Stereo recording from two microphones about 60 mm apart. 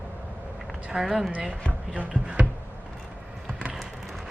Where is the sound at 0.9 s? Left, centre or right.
Centre.